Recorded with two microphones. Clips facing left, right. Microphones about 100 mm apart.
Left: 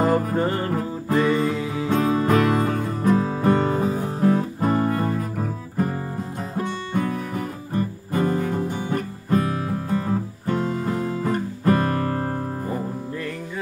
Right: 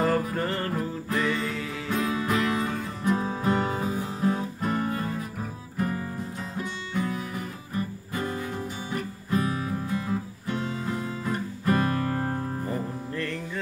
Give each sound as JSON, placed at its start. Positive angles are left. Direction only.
{"t": 0.0, "sound": "music", "side_deg": 20}
{"t": 1.9, "sound": "music", "side_deg": 45}
{"t": 10.4, "sound": "music", "side_deg": 45}